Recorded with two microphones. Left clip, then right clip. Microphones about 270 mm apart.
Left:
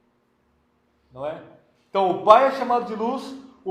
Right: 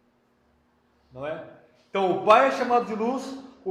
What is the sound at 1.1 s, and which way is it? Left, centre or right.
A man's voice, centre.